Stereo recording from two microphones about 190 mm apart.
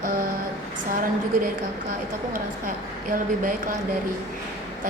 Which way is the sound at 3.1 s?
45° right (ahead or behind).